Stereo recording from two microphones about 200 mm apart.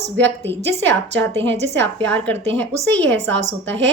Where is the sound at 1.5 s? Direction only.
60° right (ahead or behind).